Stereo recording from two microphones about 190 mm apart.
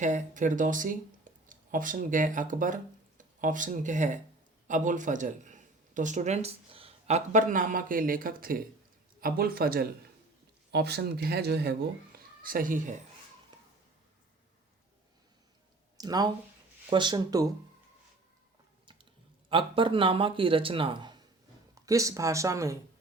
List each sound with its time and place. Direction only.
0.0 s speech: 40° right (ahead or behind)
7.3 s speech: 45° right (ahead or behind)
16.0 s speech: 20° right (ahead or behind)
19.5 s speech: 25° right (ahead or behind)